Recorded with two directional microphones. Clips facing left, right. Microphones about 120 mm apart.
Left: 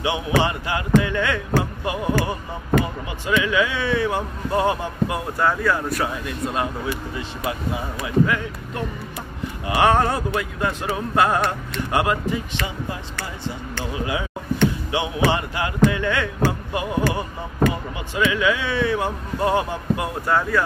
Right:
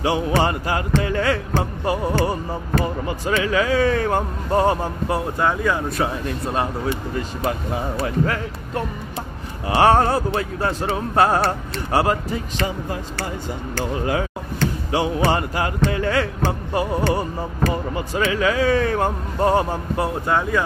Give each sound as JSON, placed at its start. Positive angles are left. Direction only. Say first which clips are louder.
{"t": 0.4, "sound": "music", "louder": "right 2 dB", "side_deg": -40}
{"t": 5.4, "sound": "speech", "louder": "left 2 dB", "side_deg": -20}
{"t": 6.2, "sound": "music", "louder": "right 2 dB", "side_deg": -35}
{"t": 13.7, "sound": "speech", "louder": "right 5 dB", "side_deg": -45}
{"t": 20.2, "sound": "speech", "louder": "left 2 dB", "side_deg": -20}